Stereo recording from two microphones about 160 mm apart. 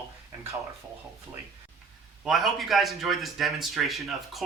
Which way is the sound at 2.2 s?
Centre (ahead or behind).